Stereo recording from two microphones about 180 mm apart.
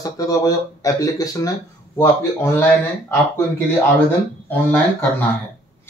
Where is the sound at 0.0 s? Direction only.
20° left (ahead or behind).